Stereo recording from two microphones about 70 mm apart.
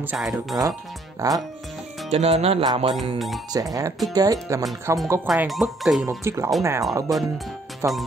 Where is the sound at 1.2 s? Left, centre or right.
Right.